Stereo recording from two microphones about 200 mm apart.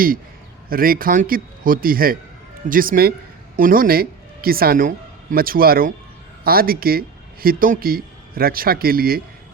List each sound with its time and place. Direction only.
0.7 s a man's voice: 45° right (ahead or behind)